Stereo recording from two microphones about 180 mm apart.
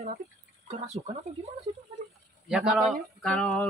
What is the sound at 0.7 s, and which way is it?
Speech, 35° right (ahead or behind).